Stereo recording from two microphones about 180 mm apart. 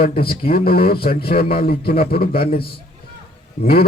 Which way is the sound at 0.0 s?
60° left (ahead or behind).